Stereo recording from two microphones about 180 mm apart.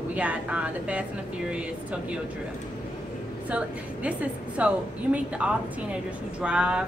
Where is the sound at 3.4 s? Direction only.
5° right (ahead or behind).